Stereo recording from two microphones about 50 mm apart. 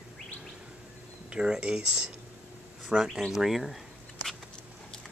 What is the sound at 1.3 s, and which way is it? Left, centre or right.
Speech, centre.